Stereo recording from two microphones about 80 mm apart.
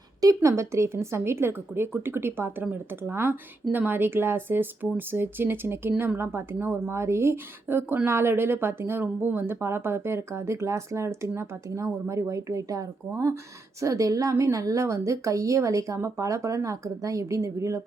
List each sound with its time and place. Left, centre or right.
0.2 s a woman's voice: right